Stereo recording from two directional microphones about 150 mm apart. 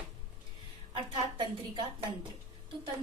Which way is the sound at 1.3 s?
30° right (ahead or behind).